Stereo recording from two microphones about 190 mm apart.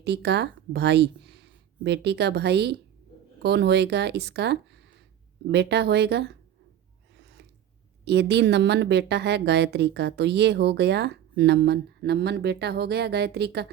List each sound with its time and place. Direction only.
0.0 s a woman's voice: 60° right (ahead or behind)
7.2 s a sound: 65° right (ahead or behind)
8.0 s a woman's voice: 60° right (ahead or behind)